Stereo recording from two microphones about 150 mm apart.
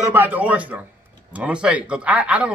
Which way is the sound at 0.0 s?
15° right (ahead or behind).